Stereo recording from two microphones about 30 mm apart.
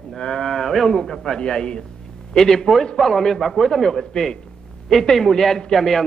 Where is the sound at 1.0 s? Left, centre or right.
Left.